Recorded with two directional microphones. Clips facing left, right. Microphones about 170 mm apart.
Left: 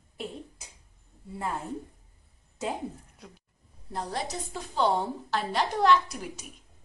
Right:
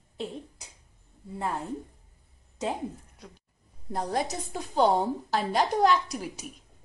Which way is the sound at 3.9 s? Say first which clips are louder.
Right 4 dB; 50° right (ahead or behind).